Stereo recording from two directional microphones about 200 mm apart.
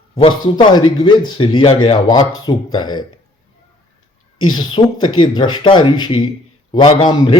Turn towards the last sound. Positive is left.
turn(degrees=25)  # may be behind; listen again after turning